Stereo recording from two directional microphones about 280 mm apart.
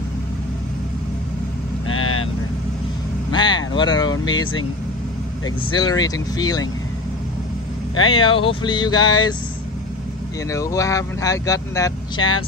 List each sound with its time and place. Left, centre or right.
1.9 s vehicle: left
3.3 s vehicle: centre
5.8 s speech: centre
8.1 s speech: centre
10.5 s speech: centre